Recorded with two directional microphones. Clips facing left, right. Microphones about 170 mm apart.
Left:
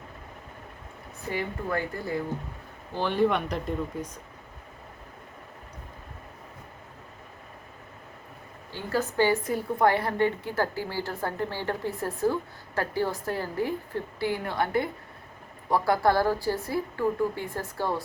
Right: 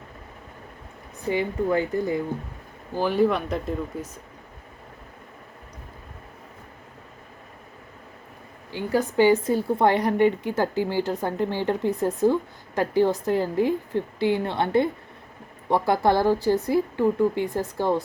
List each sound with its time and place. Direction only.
1.3 s speech: 20° right (ahead or behind)
2.9 s speech: 5° right (ahead or behind)
8.7 s a woman's voice: 15° right (ahead or behind)